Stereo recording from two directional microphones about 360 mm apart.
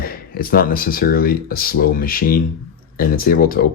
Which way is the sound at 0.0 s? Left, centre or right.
Left.